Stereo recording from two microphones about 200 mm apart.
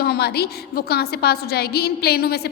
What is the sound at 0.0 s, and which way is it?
A woman's voice, 50° left (ahead or behind).